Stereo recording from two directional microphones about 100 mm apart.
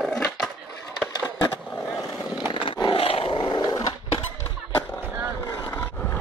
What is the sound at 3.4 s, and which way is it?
Dog, 45° left (ahead or behind).